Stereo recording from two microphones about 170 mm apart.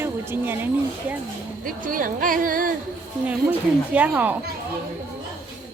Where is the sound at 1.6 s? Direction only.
55° right (ahead or behind).